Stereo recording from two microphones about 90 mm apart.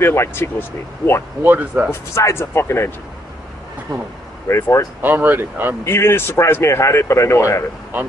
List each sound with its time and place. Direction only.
0.0 s speech: 25° left (ahead or behind)
1.4 s speech: 20° right (ahead or behind)
1.9 s speech: 30° left (ahead or behind)
4.5 s speech: 30° left (ahead or behind)
5.0 s speech: 20° right (ahead or behind)
5.9 s speech: 25° left (ahead or behind)